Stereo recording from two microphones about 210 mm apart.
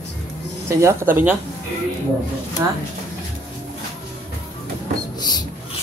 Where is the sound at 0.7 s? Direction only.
15° right (ahead or behind).